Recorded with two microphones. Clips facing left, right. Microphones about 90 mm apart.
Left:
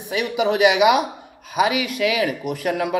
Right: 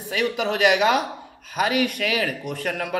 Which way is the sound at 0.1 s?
20° left (ahead or behind).